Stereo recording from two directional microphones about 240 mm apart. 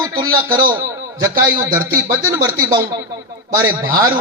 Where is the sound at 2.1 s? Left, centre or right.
Centre.